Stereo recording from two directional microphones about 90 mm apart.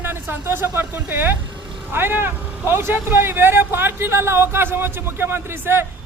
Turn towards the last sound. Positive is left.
turn(degrees=-25)  # may be behind; listen again after turning